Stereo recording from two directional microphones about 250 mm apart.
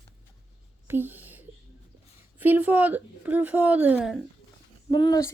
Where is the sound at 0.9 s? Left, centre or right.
Centre.